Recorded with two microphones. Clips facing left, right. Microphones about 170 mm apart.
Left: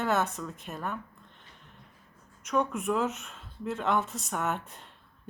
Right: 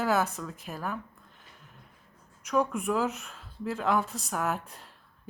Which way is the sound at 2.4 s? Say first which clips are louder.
Right 1 dB; centre (ahead or behind).